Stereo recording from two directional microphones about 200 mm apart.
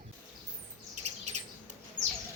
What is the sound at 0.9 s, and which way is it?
Chirp, 35° right (ahead or behind).